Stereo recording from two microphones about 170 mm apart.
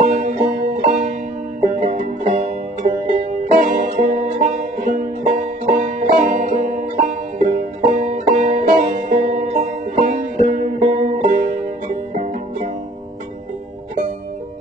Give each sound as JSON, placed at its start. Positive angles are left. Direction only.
{"t": 0.1, "sound": "music", "side_deg": -45}